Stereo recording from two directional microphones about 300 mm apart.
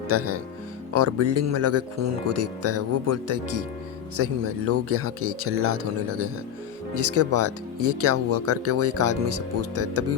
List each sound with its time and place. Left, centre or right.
0.1 s speech: right